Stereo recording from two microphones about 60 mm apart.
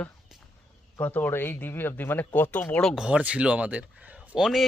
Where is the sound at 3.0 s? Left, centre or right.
Centre.